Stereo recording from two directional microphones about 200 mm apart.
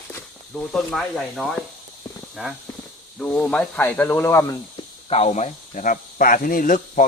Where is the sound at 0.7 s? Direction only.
Centre (ahead or behind).